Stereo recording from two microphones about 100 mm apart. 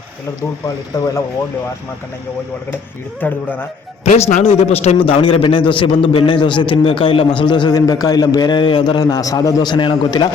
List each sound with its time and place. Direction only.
0.9 s speech: 40° left (ahead or behind)
3.2 s speech: 20° left (ahead or behind)
4.2 s a man's voice: 90° left; by 10.2 s 50° left (ahead or behind)